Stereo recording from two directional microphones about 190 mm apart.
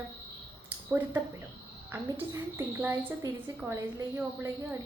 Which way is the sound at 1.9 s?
10° right (ahead or behind).